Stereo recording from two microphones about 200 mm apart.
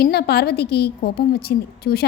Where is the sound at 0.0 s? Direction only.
55° left (ahead or behind).